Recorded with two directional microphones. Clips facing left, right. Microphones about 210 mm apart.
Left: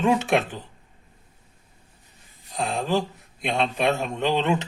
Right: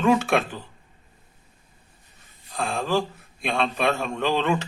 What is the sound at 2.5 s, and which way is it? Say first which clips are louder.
Speech: even; 20° left (ahead or behind).